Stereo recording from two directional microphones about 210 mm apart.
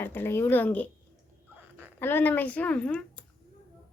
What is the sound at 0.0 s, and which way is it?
Speech, 10° left (ahead or behind).